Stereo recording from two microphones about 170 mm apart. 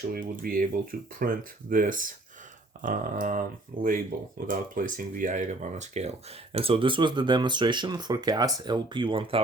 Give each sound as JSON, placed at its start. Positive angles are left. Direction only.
{"t": 0.1, "sound": "speech", "side_deg": -55}
{"t": 2.8, "sound": "a sound", "side_deg": -50}
{"t": 3.8, "sound": "speech", "side_deg": -55}